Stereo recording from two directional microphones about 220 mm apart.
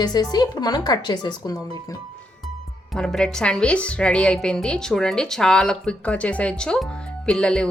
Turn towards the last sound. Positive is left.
turn(degrees=5)  # may be behind; listen again after turning